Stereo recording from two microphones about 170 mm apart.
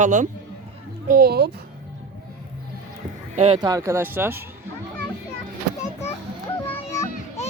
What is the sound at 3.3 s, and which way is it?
Speech, 35° right (ahead or behind).